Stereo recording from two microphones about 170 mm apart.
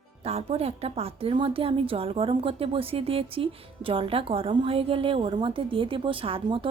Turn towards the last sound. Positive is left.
turn(degrees=-30)  # may be behind; listen again after turning